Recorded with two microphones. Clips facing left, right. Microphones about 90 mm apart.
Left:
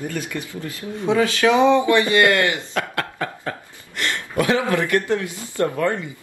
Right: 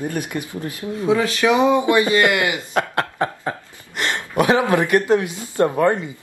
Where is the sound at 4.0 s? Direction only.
20° right (ahead or behind).